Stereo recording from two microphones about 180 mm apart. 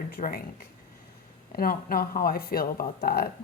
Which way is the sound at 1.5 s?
55° left (ahead or behind).